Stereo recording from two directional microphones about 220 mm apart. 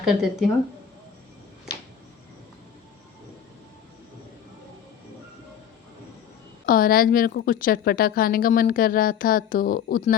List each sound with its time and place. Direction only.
0.0 s speech: centre (ahead or behind)
6.7 s a woman's voice: 40° left (ahead or behind)